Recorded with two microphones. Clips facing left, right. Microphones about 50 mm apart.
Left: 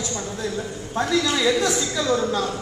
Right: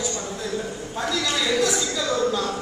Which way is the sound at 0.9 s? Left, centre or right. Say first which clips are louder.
Left 5 dB; left.